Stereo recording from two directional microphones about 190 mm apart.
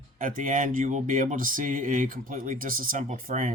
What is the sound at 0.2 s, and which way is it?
Speech, 45° right (ahead or behind).